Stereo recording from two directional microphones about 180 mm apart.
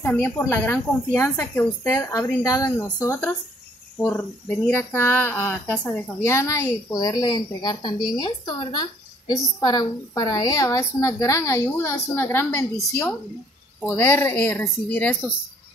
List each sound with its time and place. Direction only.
0.0 s a woman's voice: 10° left (ahead or behind)